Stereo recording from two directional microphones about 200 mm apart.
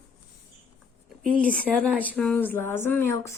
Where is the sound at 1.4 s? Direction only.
5° left (ahead or behind).